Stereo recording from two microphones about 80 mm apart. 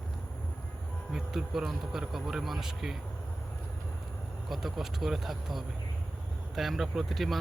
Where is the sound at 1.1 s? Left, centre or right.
Centre.